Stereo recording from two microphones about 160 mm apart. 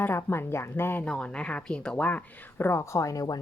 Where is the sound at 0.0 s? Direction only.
15° left (ahead or behind).